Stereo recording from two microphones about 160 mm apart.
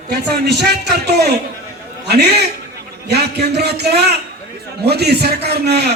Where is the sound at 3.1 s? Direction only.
90° right.